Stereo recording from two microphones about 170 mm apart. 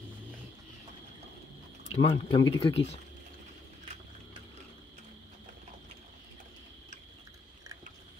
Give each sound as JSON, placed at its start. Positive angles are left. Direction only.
{"t": 2.0, "sound": "speech", "side_deg": 30}